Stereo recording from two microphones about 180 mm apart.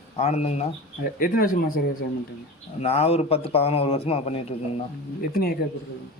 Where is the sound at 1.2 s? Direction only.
50° left (ahead or behind).